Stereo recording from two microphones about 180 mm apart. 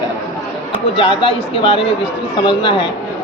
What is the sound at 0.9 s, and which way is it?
Speech, 30° left (ahead or behind).